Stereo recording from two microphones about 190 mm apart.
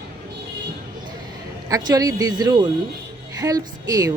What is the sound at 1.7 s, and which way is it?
Speech, 20° right (ahead or behind).